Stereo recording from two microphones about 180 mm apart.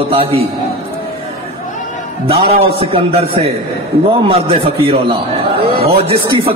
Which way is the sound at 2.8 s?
30° right (ahead or behind).